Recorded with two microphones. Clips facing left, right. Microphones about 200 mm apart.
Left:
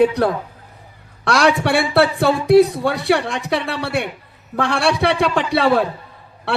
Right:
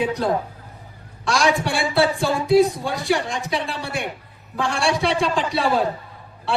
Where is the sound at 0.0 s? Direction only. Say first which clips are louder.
Left 6 dB; 65° left (ahead or behind).